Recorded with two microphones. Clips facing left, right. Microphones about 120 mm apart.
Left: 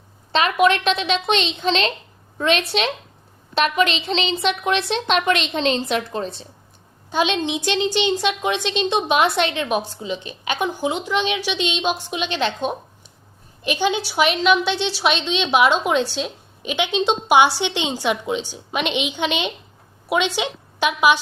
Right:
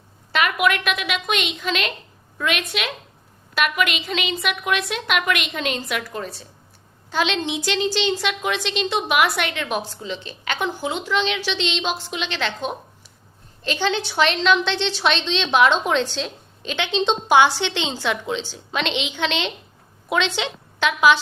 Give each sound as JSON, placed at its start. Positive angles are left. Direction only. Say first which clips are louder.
{"t": 0.3, "sound": "a woman's voice", "louder": "left 3 dB", "side_deg": 25}